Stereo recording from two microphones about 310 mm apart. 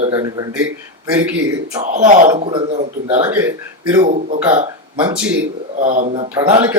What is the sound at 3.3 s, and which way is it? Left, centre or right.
Speech, centre.